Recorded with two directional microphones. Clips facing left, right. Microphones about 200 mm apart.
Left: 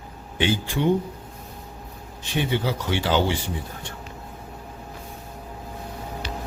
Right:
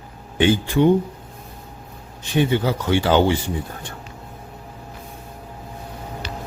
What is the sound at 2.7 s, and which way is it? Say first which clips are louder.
Speech: right 5 dB; 50° right (ahead or behind).